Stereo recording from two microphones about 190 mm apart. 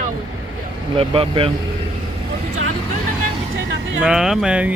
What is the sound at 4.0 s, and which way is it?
Speech, 5° right (ahead or behind).